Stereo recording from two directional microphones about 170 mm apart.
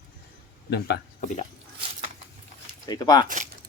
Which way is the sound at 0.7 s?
75° left (ahead or behind).